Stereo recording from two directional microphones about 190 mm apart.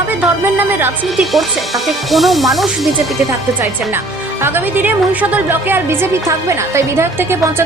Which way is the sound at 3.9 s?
10° right (ahead or behind).